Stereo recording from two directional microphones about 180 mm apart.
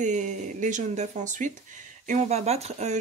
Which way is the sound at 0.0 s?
40° right (ahead or behind).